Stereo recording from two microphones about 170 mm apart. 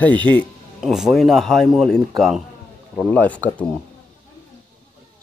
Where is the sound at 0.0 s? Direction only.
10° left (ahead or behind).